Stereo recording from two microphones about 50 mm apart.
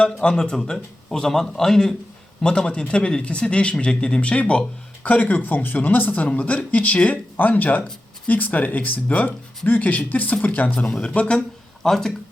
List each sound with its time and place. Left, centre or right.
0.0 s a man's voice: centre
11.8 s a man's voice: centre